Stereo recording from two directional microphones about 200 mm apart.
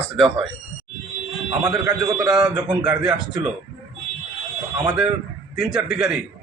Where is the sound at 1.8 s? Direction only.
20° right (ahead or behind).